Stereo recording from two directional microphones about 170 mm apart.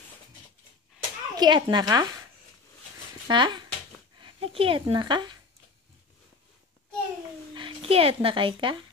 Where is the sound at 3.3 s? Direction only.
25° right (ahead or behind).